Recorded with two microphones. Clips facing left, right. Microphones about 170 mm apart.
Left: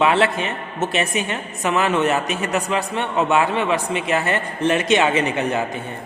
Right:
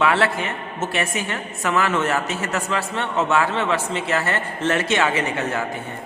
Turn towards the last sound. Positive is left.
turn(degrees=20)  # may be behind; listen again after turning